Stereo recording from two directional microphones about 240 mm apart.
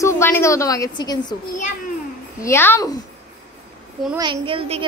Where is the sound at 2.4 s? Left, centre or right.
Centre.